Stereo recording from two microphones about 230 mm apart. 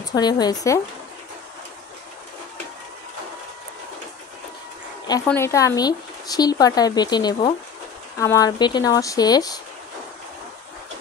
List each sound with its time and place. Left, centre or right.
0.1 s speech: centre
5.0 s speech: centre